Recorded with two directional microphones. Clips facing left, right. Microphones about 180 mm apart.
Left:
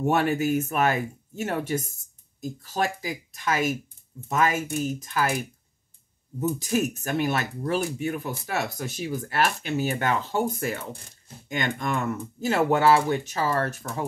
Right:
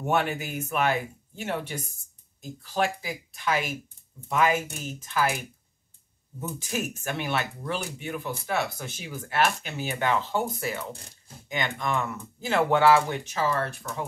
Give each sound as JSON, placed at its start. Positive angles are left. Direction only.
{"t": 0.1, "sound": "speech", "side_deg": 40}
{"t": 6.6, "sound": "speech", "side_deg": 40}